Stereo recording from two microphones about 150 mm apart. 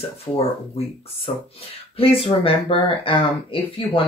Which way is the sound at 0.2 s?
40° left (ahead or behind).